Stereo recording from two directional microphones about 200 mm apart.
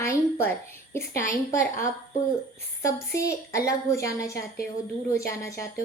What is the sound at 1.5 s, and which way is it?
Speech, 40° left (ahead or behind).